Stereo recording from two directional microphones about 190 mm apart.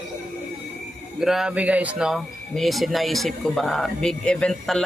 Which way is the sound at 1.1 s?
Centre (ahead or behind).